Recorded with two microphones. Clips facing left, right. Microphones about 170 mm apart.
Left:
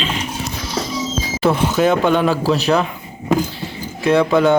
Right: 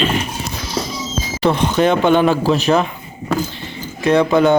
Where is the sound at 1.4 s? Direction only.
5° left (ahead or behind).